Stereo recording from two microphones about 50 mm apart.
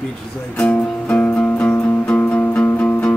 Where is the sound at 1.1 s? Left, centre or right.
Left.